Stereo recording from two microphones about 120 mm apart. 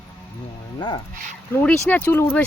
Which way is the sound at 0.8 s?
40° left (ahead or behind).